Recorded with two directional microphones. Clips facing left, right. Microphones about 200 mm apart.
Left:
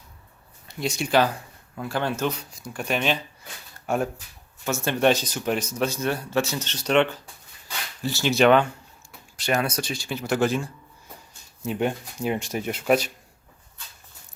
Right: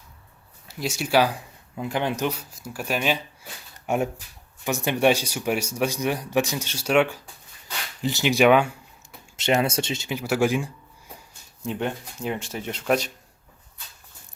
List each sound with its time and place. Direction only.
0.7 s speech: 5° right (ahead or behind)
9.4 s speech: 25° right (ahead or behind)
10.2 s speech: 10° right (ahead or behind)
11.6 s speech: 10° left (ahead or behind)